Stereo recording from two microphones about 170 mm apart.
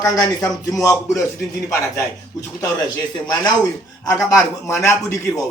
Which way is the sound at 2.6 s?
20° left (ahead or behind).